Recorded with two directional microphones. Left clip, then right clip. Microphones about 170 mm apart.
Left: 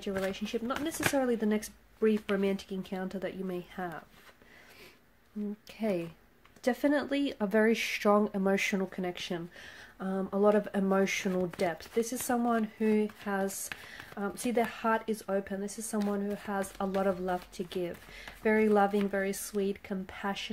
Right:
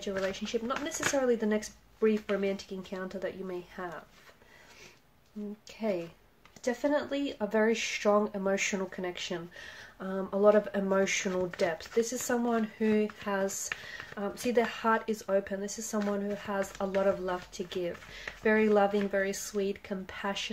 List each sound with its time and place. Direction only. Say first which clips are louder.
0.0 s speech: right 1 dB; 30° left (ahead or behind)
5.8 s speech: even; 40° left (ahead or behind)